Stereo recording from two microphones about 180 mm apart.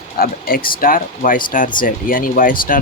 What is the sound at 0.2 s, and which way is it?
Speech, 55° left (ahead or behind).